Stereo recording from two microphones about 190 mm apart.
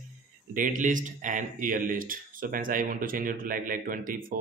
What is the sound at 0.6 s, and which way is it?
Speech, 45° right (ahead or behind).